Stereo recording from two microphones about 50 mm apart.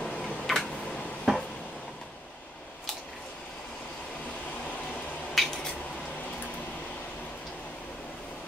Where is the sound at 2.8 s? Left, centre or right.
Centre.